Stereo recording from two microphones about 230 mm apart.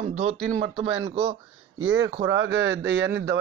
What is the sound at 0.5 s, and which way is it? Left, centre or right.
Speech, right.